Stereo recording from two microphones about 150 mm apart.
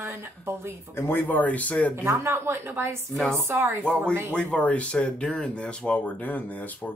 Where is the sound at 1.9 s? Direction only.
15° right (ahead or behind).